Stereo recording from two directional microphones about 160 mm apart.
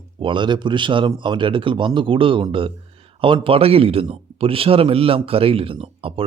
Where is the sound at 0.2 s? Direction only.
30° right (ahead or behind).